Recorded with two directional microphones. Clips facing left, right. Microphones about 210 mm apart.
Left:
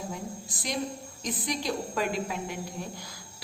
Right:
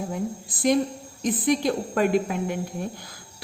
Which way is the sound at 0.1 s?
55° right (ahead or behind).